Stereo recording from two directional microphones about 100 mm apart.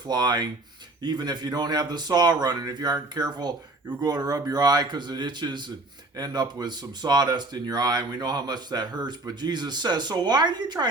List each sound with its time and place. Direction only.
0.1 s speech: 45° right (ahead or behind)